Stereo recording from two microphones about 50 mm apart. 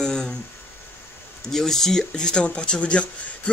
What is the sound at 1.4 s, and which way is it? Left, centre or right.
Speech, centre.